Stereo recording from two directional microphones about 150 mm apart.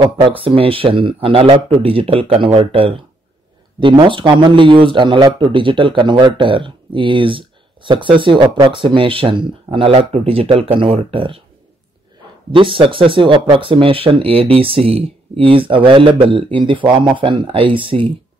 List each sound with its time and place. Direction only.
0.4 s speech: 35° right (ahead or behind)
12.5 s speech: 35° right (ahead or behind)